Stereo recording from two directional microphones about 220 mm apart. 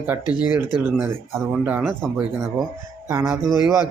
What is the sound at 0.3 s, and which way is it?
Speech, 10° right (ahead or behind).